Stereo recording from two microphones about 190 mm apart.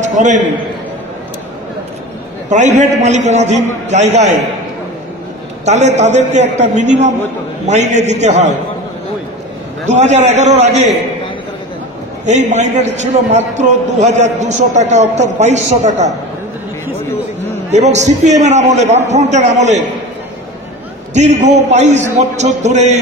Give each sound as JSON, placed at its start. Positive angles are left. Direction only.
{"t": 0.1, "sound": "a man's voice", "side_deg": -40}
{"t": 2.5, "sound": "a man's voice", "side_deg": -40}
{"t": 5.7, "sound": "a man's voice", "side_deg": -35}
{"t": 9.8, "sound": "a man's voice", "side_deg": -40}
{"t": 12.3, "sound": "a man's voice", "side_deg": -40}
{"t": 17.6, "sound": "a man's voice", "side_deg": -35}
{"t": 21.1, "sound": "a man's voice", "side_deg": -40}